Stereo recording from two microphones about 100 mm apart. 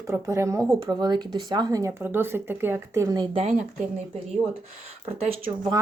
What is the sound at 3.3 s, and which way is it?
Speech, 90° right.